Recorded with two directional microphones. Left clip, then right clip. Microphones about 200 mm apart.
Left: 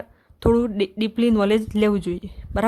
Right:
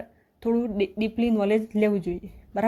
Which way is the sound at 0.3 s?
25° left (ahead or behind).